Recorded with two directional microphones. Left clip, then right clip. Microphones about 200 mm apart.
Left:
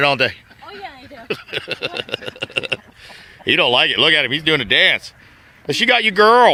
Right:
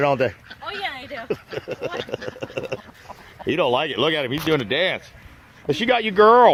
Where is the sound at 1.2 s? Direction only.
20° left (ahead or behind).